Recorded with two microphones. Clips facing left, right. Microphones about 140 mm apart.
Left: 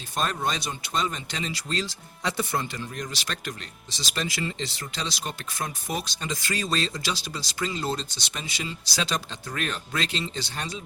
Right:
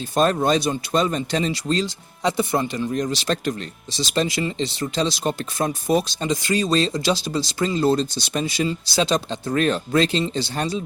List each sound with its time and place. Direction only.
0.2 s speech: 40° right (ahead or behind)
2.2 s speech: 15° right (ahead or behind)
7.6 s speech: 40° right (ahead or behind)
8.9 s speech: 25° right (ahead or behind)